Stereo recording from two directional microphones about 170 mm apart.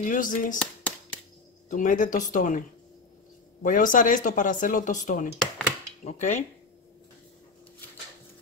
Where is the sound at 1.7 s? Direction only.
50° left (ahead or behind).